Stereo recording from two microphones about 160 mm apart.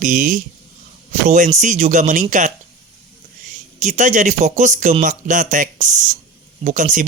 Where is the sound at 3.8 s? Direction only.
50° right (ahead or behind).